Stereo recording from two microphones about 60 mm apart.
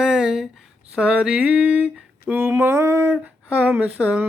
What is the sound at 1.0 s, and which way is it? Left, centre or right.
Speech, centre.